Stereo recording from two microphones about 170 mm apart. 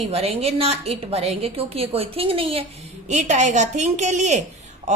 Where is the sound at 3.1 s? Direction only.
45° right (ahead or behind).